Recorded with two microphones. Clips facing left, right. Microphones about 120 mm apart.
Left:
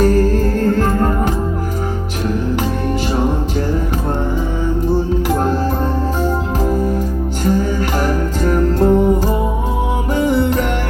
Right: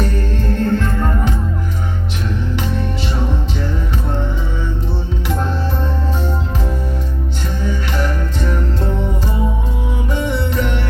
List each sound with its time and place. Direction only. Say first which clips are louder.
4.9 s music: left 7 dB; 45° left (ahead or behind)
7.9 s music: left 4 dB; 40° left (ahead or behind)